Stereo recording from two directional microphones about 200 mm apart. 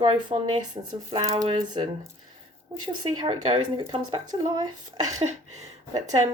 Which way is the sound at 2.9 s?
20° right (ahead or behind).